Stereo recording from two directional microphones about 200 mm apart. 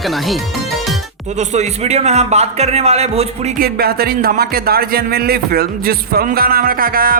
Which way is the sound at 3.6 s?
50° right (ahead or behind).